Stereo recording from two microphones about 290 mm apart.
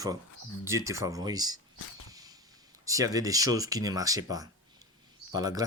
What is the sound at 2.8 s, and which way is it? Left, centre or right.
Speech, centre.